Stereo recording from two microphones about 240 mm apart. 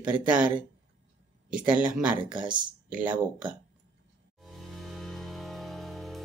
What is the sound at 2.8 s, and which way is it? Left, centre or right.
Speech, centre.